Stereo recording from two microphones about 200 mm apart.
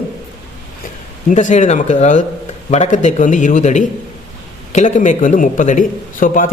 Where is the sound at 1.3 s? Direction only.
35° left (ahead or behind).